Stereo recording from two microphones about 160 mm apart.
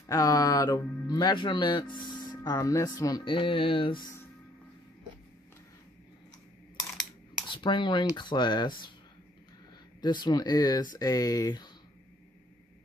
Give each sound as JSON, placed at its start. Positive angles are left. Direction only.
{"t": 0.0, "sound": "speech", "side_deg": 20}
{"t": 7.5, "sound": "speech", "side_deg": 30}
{"t": 10.0, "sound": "speech", "side_deg": 25}